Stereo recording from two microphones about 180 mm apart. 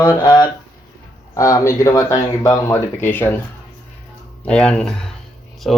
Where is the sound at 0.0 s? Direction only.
20° left (ahead or behind).